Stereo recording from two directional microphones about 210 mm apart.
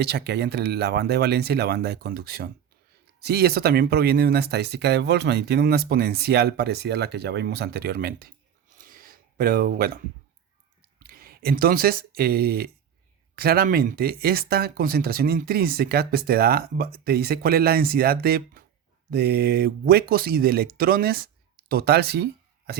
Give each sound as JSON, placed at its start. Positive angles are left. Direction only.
{"t": 0.0, "sound": "speech", "side_deg": -50}
{"t": 8.8, "sound": "a sound", "side_deg": -40}
{"t": 11.0, "sound": "speech", "side_deg": -45}